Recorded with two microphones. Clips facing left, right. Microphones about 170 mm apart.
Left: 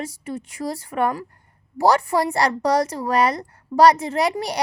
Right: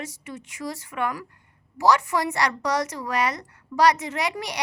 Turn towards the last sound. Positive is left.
turn(degrees=35)  # may be behind; listen again after turning